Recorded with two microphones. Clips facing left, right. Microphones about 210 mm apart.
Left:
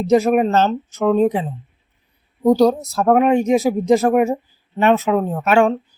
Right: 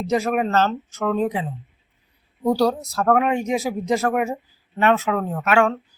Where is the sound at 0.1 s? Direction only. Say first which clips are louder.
Left 6 dB; 20° left (ahead or behind).